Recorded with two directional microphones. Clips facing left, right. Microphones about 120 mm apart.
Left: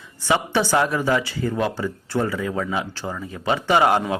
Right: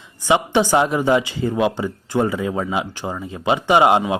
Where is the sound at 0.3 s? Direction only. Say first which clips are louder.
Right 4 dB; 15° right (ahead or behind).